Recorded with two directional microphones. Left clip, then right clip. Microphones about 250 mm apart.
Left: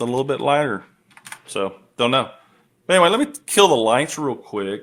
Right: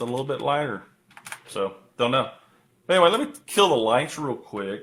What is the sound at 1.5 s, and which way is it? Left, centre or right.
Speech, left.